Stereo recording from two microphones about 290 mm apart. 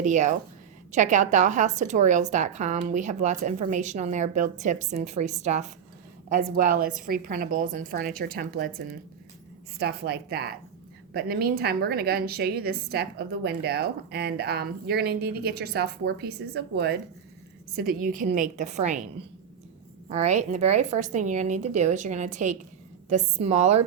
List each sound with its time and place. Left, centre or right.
0.0 s a woman's voice: right
20.1 s a woman's voice: right